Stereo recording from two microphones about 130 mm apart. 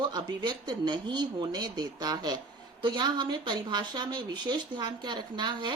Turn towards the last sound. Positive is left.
turn(degrees=-35)  # may be behind; listen again after turning